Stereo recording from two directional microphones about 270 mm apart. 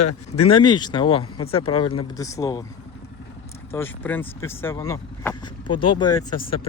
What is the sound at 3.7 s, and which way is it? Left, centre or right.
Speech, centre.